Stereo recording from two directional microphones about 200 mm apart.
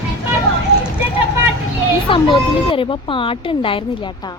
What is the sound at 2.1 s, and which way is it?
A woman's voice, 25° left (ahead or behind).